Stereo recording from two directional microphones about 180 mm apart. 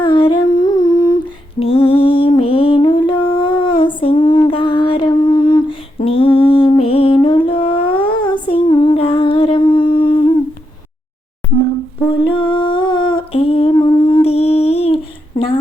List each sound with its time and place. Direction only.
0.0 s humming: 25° left (ahead or behind)
6.1 s music: 30° left (ahead or behind)
8.2 s humming: 30° left (ahead or behind)
11.4 s a sound: 10° left (ahead or behind)
12.2 s humming: 30° left (ahead or behind)